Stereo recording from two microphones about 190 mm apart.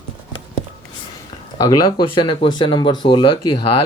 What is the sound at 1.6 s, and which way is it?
Speech, 20° left (ahead or behind).